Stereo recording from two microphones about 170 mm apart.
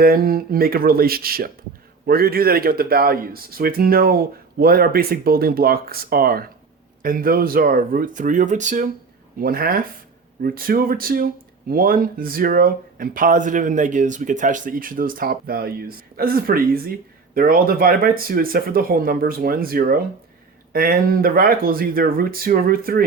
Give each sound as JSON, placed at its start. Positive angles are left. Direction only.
{"t": 0.0, "sound": "speech", "side_deg": -60}
{"t": 9.4, "sound": "speech", "side_deg": -60}